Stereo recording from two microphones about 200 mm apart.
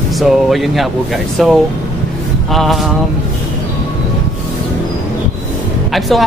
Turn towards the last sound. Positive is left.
turn(degrees=0)  # may be behind; listen again after turning